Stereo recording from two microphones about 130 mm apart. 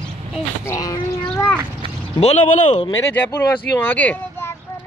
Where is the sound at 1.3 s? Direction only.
15° left (ahead or behind).